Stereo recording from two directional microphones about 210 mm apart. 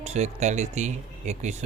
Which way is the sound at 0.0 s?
35° right (ahead or behind).